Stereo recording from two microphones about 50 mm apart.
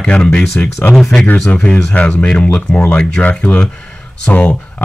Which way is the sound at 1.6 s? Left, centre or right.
Left.